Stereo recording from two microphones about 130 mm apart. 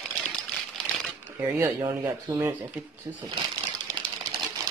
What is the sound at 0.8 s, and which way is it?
Crumpling, 10° left (ahead or behind).